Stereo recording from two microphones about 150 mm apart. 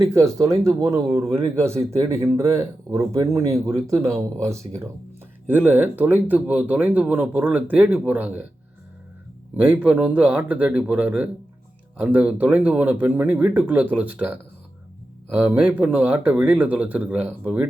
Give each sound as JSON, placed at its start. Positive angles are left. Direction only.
{"t": 0.1, "sound": "speech", "side_deg": -20}
{"t": 9.6, "sound": "speech", "side_deg": -10}